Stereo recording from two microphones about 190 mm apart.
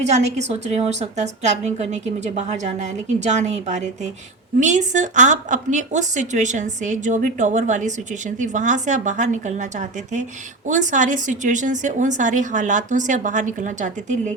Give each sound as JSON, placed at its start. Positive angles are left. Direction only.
{"t": 0.0, "sound": "a woman's voice", "side_deg": -35}